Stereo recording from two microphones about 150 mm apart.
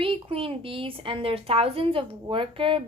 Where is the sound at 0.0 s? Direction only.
35° right (ahead or behind).